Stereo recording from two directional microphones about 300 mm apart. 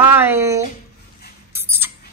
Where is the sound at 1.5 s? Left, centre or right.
Centre.